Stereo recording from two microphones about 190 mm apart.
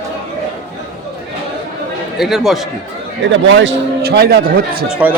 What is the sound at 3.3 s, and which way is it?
A man's voice, 70° right (ahead or behind).